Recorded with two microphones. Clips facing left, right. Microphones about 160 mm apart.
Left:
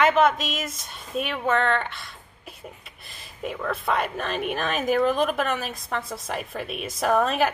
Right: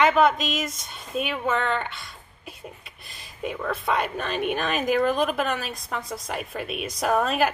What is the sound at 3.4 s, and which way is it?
Speech, centre (ahead or behind).